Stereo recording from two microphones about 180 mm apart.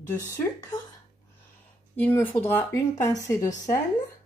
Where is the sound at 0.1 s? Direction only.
20° left (ahead or behind).